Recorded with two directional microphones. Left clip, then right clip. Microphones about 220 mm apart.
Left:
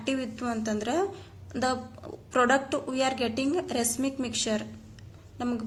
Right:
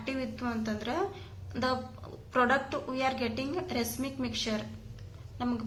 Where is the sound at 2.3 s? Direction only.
50° left (ahead or behind).